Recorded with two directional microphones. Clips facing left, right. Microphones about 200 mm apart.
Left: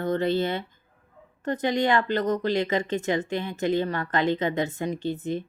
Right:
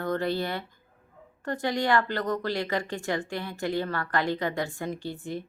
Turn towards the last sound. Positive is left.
turn(degrees=20)  # may be behind; listen again after turning